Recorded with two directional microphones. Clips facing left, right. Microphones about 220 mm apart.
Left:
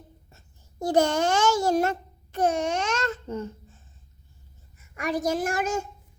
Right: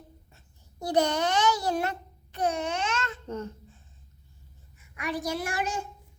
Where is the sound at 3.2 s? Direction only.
10° left (ahead or behind).